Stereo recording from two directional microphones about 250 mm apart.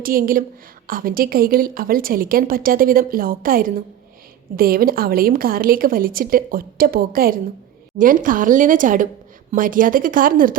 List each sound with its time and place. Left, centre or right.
0.0 s a woman's voice: right